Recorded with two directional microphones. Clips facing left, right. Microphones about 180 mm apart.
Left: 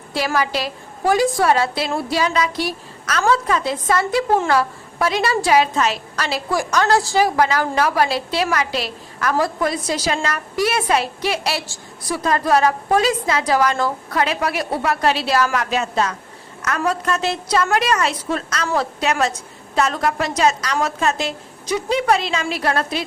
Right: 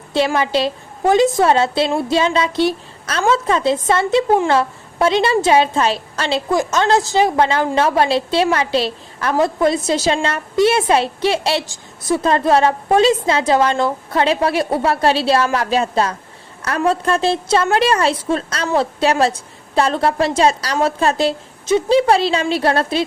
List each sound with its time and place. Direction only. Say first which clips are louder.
0.1 s a woman's voice: right 4 dB; 25° right (ahead or behind)